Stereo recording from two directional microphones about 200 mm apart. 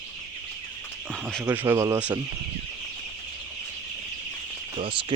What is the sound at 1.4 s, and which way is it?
Speech, 10° right (ahead or behind).